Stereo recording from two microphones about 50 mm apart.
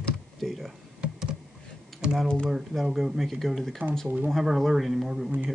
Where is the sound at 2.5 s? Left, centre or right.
Centre.